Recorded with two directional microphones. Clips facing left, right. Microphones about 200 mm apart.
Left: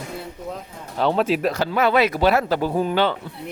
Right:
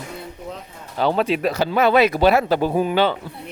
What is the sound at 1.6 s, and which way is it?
Speech, 20° right (ahead or behind).